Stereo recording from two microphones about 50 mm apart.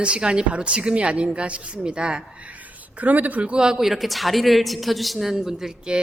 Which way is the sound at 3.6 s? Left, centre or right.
Centre.